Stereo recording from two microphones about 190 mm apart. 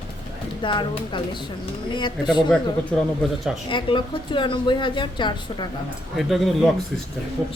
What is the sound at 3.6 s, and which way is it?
A woman's voice, 25° left (ahead or behind).